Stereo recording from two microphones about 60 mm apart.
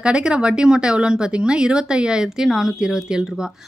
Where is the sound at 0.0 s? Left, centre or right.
Centre.